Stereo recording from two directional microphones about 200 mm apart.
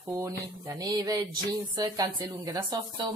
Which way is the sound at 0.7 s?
20° right (ahead or behind).